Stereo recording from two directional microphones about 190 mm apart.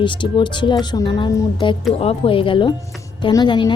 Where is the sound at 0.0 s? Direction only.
25° left (ahead or behind).